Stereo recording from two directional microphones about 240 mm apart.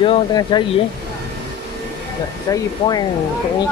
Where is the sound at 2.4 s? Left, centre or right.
Centre.